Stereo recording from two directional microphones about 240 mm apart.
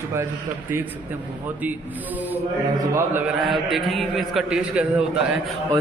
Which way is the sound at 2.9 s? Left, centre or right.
Centre.